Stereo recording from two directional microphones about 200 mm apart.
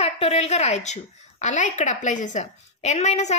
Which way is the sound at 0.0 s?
30° left (ahead or behind).